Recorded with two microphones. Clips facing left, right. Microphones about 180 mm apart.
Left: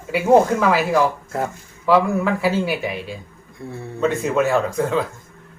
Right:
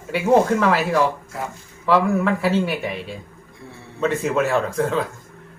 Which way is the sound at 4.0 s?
Centre (ahead or behind).